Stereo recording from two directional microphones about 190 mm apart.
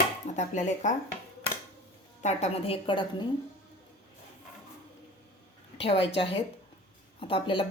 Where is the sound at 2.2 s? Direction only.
35° left (ahead or behind).